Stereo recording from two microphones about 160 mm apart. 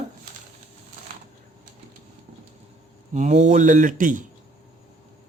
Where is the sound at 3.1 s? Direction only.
45° right (ahead or behind).